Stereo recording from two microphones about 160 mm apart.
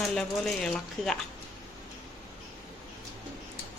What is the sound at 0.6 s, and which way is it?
Speech, 5° left (ahead or behind).